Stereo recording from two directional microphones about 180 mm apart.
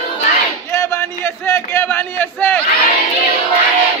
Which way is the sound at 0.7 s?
15° left (ahead or behind).